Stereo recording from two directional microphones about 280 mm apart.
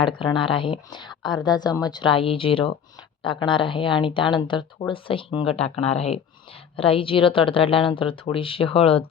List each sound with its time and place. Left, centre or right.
0.0 s a woman's voice: centre